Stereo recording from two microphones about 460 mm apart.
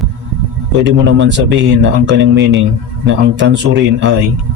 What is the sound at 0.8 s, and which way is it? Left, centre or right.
Speech, right.